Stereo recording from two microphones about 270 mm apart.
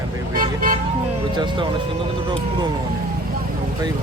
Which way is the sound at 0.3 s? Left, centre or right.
Right.